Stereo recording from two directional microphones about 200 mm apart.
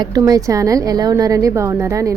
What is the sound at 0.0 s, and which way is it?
Speech, 20° right (ahead or behind).